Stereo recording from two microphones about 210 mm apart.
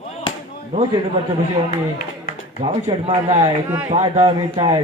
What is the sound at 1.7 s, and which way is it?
Speech, 45° left (ahead or behind).